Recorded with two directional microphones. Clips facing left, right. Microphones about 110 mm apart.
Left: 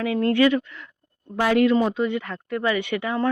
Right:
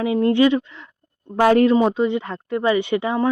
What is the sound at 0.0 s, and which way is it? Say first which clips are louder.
Speech: right 3 dB; 25° right (ahead or behind).